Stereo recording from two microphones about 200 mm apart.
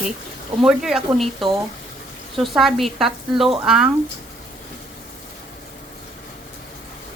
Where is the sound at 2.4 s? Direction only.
Centre (ahead or behind).